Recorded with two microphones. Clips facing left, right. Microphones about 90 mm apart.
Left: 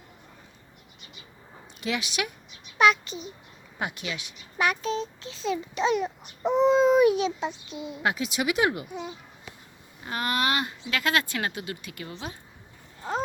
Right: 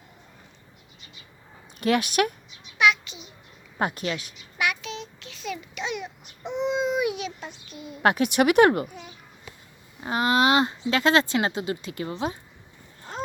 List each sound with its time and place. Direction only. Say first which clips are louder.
1.8 s speech: right 8 dB; 50° right (ahead or behind)
2.7 s a child's voice: left 1 dB; 40° left (ahead or behind)
3.8 s a woman's voice: right 6 dB; 40° right (ahead or behind)
4.5 s a child's voice: left 3 dB; 35° left (ahead or behind)
7.3 s a child's voice: left 7 dB; 20° left (ahead or behind)
8.0 s speech: right 7 dB; 60° right (ahead or behind)
8.9 s a child's voice: left 7 dB; 20° left (ahead or behind)
10.0 s speech: right 6 dB; 20° right (ahead or behind)